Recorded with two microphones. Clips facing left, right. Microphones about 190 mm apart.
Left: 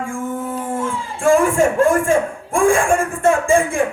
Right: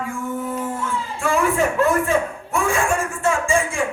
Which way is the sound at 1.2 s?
45° left (ahead or behind).